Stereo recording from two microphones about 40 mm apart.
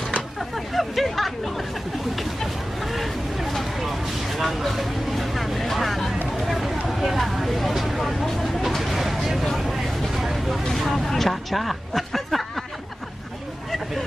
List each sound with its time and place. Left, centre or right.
0.7 s hubbub: centre
4.4 s vehicle: centre
6.4 s a sound: centre
8.4 s vehicle: centre
10.1 s a sound: centre
11.1 s hubbub: centre